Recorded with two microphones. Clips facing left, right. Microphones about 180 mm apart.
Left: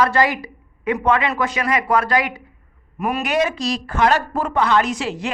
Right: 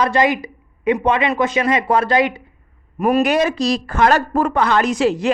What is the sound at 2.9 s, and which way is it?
Speech, 35° right (ahead or behind).